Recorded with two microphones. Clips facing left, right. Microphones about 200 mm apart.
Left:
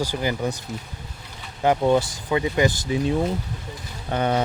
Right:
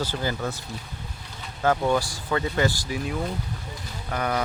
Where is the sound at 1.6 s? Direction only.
20° left (ahead or behind).